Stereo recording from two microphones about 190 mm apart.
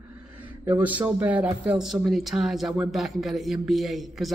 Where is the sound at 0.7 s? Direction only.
10° right (ahead or behind).